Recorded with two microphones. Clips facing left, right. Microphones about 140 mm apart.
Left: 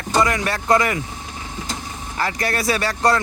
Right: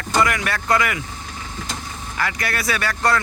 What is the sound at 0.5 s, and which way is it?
Speech, 20° left (ahead or behind).